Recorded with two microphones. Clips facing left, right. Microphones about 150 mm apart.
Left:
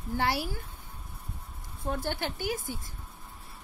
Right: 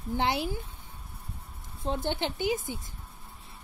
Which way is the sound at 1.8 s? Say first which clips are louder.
Right 2 dB; 20° right (ahead or behind).